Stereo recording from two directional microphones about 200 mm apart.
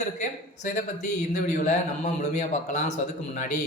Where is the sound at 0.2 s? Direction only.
40° left (ahead or behind).